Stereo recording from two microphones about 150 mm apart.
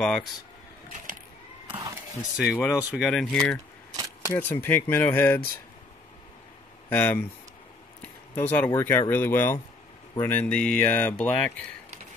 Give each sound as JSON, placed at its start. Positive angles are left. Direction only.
{"t": 0.0, "sound": "speech", "side_deg": 5}
{"t": 1.7, "sound": "a sound", "side_deg": -25}
{"t": 2.3, "sound": "speech", "side_deg": -5}
{"t": 4.3, "sound": "speech", "side_deg": 15}
{"t": 6.9, "sound": "speech", "side_deg": 10}
{"t": 8.0, "sound": "a sound", "side_deg": 10}
{"t": 8.7, "sound": "speech", "side_deg": 15}